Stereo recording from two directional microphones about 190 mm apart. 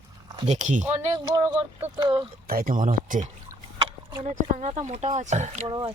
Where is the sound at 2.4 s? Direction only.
45° right (ahead or behind).